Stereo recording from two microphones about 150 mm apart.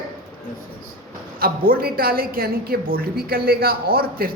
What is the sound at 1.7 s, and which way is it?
A woman's voice, 85° right.